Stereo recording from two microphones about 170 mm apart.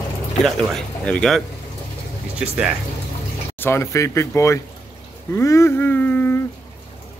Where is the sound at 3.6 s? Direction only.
15° left (ahead or behind).